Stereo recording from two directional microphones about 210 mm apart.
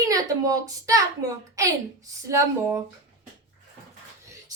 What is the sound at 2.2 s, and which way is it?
Speech, 15° right (ahead or behind).